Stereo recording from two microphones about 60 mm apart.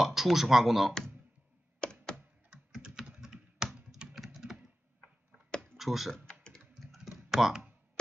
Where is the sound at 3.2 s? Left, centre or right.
Centre.